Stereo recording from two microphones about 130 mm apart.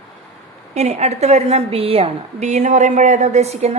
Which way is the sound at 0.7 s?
60° right (ahead or behind).